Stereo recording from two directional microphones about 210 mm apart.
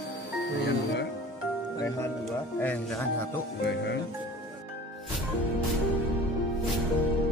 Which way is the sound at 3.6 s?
55° left (ahead or behind).